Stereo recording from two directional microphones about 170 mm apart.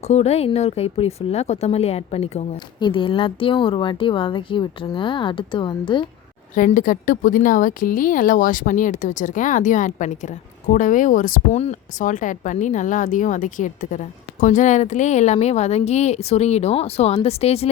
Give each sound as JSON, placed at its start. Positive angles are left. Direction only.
{"t": 0.1, "sound": "speech", "side_deg": 40}
{"t": 6.5, "sound": "speech", "side_deg": 50}